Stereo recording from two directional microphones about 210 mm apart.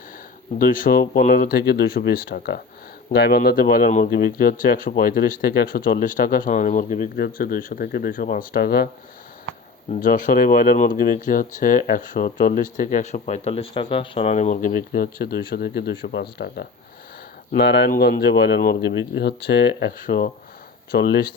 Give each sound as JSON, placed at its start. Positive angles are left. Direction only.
{"t": 0.6, "sound": "speech", "side_deg": 40}
{"t": 9.9, "sound": "speech", "side_deg": 40}